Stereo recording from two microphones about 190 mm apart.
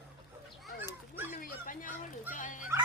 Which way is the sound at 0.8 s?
10° right (ahead or behind).